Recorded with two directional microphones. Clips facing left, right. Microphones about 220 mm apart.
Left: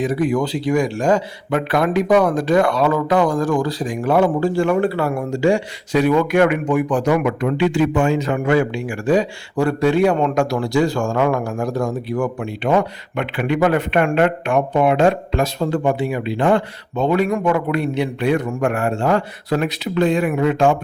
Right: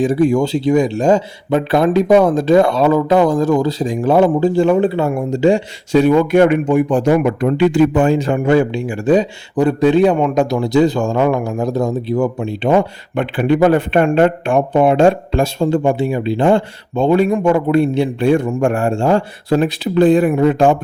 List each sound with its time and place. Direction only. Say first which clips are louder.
0.0 s a man's voice: right 5 dB; 30° right (ahead or behind)